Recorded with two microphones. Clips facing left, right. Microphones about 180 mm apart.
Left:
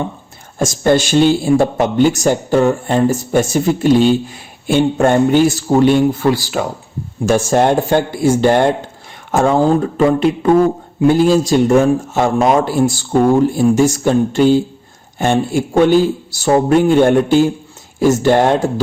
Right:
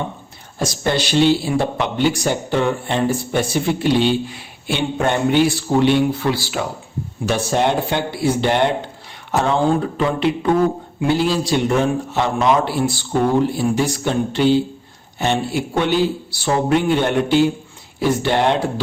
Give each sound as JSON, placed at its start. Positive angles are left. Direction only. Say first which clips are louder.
{"t": 0.6, "sound": "speech", "louder": "left 7 dB", "side_deg": 45}